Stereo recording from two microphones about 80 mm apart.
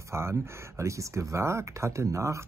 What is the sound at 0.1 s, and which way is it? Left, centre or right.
Speech, right.